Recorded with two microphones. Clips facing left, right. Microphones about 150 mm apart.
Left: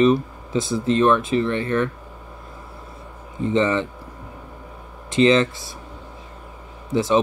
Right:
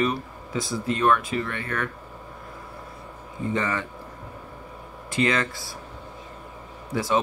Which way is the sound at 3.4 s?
25° left (ahead or behind).